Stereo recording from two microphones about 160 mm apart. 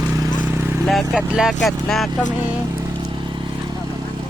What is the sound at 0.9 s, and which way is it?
Speech, centre (ahead or behind).